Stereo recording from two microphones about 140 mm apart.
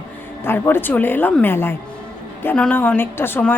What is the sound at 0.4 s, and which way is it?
A woman's voice, 15° left (ahead or behind).